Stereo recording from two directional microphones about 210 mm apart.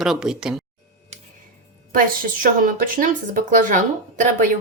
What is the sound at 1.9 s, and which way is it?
A woman's voice, 40° right (ahead or behind).